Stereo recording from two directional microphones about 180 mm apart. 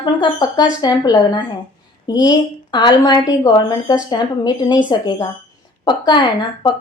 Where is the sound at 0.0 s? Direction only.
25° left (ahead or behind).